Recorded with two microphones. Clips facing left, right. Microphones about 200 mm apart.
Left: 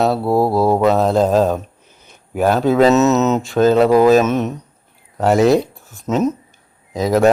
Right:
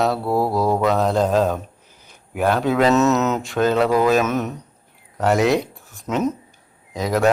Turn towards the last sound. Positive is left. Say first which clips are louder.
# left 5 dB
turn(degrees=35)  # may be behind; listen again after turning